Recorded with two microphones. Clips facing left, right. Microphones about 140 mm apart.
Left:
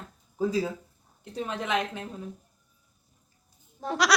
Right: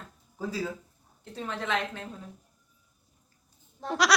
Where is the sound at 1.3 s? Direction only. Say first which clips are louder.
Left 2 dB; 15° left (ahead or behind).